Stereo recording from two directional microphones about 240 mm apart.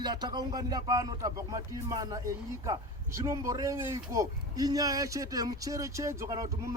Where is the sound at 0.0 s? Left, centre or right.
Centre.